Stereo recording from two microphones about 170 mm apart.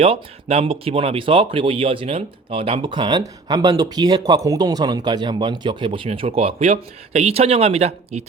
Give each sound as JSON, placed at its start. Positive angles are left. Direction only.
{"t": 0.0, "sound": "speech", "side_deg": -35}